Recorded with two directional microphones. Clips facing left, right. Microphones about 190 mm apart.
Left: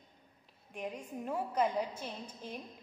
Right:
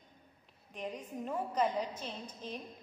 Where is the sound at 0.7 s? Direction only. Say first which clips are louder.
Even; 10° left (ahead or behind).